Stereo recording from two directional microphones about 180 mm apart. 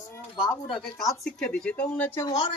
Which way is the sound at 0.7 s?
Centre (ahead or behind).